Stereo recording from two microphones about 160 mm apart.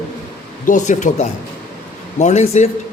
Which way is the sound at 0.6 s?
50° left (ahead or behind).